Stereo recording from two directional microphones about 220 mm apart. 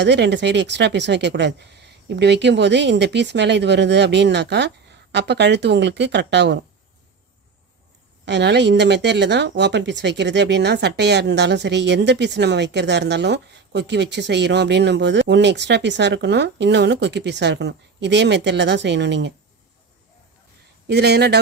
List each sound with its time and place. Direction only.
0.0 s speech: 50° right (ahead or behind)
8.2 s speech: 50° right (ahead or behind)
20.8 s speech: 50° right (ahead or behind)